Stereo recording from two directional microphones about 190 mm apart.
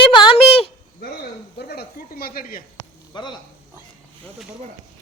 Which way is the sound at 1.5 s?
55° left (ahead or behind).